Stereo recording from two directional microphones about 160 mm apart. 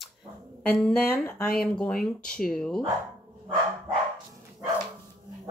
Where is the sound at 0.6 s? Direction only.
5° left (ahead or behind).